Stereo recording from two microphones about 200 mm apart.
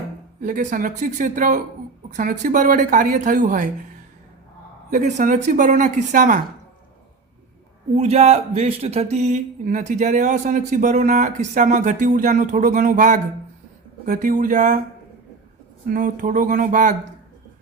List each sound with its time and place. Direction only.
0.4 s speech: 40° right (ahead or behind)
4.9 s speech: 35° right (ahead or behind)
7.9 s speech: 30° right (ahead or behind)
15.9 s speech: 40° right (ahead or behind)